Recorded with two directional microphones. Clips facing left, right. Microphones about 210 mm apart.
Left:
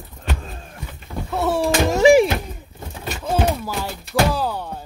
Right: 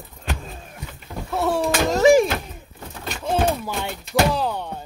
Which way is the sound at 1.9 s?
10° left (ahead or behind).